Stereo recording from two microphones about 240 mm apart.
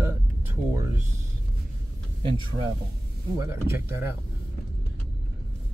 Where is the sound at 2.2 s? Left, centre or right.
Right.